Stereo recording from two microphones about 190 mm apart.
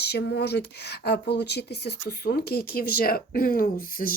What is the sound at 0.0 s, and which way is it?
Speech, 60° left (ahead or behind).